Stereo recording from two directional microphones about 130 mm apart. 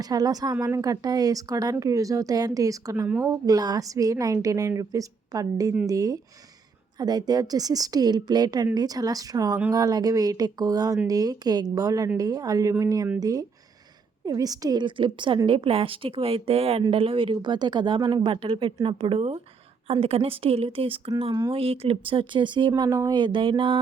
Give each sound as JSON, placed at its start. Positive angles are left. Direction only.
{"t": 0.0, "sound": "a woman's voice", "side_deg": -30}